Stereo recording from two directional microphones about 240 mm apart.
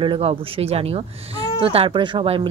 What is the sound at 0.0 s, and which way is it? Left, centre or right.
Speech, right.